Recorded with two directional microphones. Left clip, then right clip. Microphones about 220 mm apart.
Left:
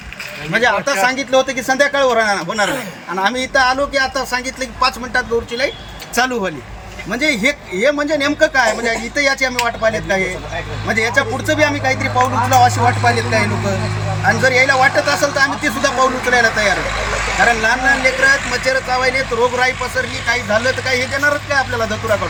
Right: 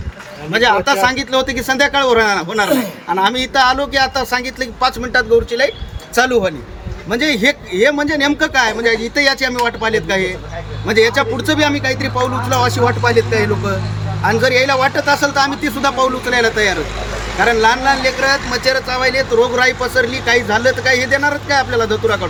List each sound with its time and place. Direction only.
0.5 s speech: 25° right (ahead or behind)